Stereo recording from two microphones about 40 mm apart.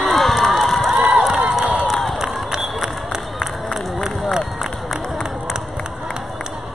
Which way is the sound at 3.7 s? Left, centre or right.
Centre.